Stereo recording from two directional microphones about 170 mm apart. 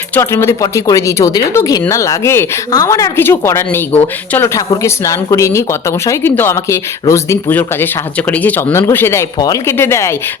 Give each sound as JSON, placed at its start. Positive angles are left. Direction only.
{"t": 0.1, "sound": "speech", "side_deg": 15}